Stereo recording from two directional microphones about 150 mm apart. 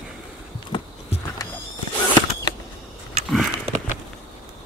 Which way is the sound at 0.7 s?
35° left (ahead or behind).